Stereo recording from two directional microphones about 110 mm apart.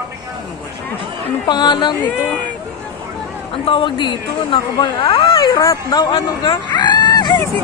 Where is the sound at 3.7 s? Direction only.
50° left (ahead or behind).